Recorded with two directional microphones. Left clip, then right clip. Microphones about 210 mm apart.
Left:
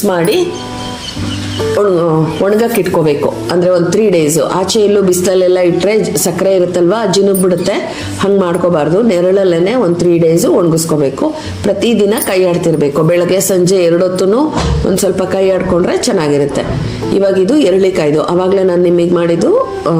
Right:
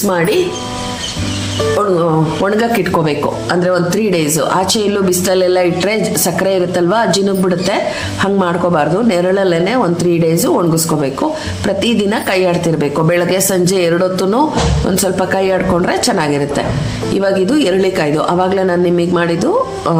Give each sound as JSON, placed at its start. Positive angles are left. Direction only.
{"t": 2.4, "sound": "speech", "side_deg": 0}